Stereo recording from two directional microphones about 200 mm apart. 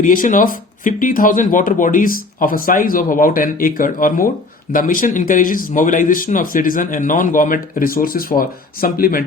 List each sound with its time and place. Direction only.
0.0 s speech: 40° left (ahead or behind)